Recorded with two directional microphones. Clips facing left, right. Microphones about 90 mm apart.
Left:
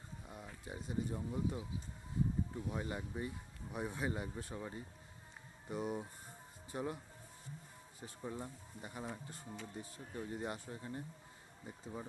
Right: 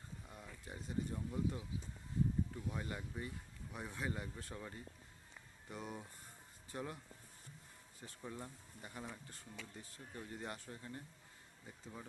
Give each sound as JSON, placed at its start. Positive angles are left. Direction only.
{"t": 0.3, "sound": "speech", "side_deg": 15}
{"t": 8.0, "sound": "speech", "side_deg": 15}